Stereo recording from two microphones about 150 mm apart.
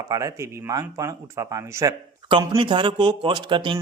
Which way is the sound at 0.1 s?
20° right (ahead or behind).